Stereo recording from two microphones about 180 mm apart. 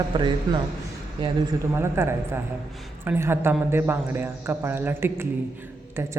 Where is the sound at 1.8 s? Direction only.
15° right (ahead or behind).